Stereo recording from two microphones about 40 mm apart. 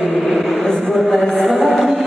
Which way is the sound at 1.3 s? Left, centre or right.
Centre.